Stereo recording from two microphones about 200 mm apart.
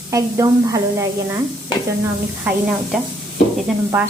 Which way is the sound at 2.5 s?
10° right (ahead or behind).